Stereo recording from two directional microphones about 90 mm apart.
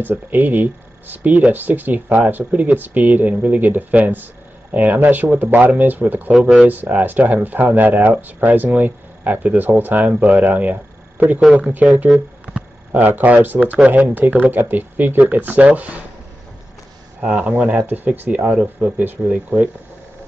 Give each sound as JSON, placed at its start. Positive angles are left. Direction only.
{"t": 0.0, "sound": "speech", "side_deg": -20}
{"t": 12.1, "sound": "a sound", "side_deg": -10}
{"t": 13.7, "sound": "speech", "side_deg": -15}
{"t": 17.2, "sound": "speech", "side_deg": -15}